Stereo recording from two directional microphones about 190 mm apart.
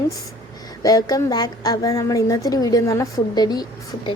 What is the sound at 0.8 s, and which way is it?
A woman's voice, 20° left (ahead or behind).